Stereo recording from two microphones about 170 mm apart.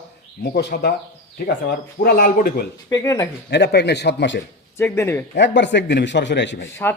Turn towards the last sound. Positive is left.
turn(degrees=15)  # may be behind; listen again after turning